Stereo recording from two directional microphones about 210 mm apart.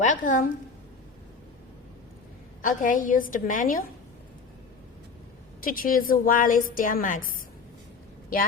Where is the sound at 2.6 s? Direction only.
40° left (ahead or behind).